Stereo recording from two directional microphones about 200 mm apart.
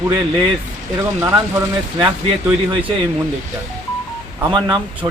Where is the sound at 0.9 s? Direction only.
15° right (ahead or behind).